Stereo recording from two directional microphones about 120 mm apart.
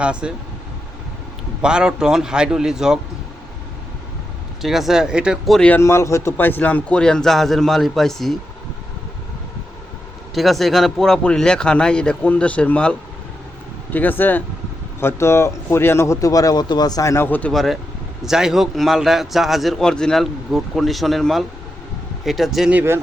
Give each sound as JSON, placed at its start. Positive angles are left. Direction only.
{"t": 0.0, "sound": "speech", "side_deg": -10}
{"t": 1.6, "sound": "a man's voice", "side_deg": -5}
{"t": 4.6, "sound": "a man's voice", "side_deg": 0}
{"t": 5.5, "sound": "speech", "side_deg": 10}
{"t": 5.8, "sound": "speech", "side_deg": 25}
{"t": 10.3, "sound": "speech", "side_deg": 0}
{"t": 17.5, "sound": "a man's voice", "side_deg": 0}
{"t": 22.7, "sound": "speech", "side_deg": -15}